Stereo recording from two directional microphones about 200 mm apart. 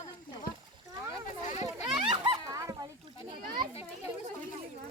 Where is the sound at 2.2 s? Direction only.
15° right (ahead or behind).